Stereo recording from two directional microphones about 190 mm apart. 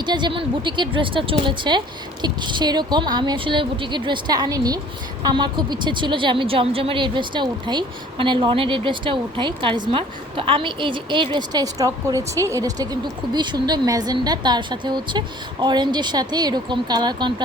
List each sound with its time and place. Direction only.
0.0 s a woman's voice: 25° right (ahead or behind)